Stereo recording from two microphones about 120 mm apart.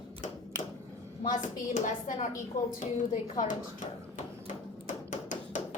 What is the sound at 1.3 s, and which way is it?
A child's voice, 90° left.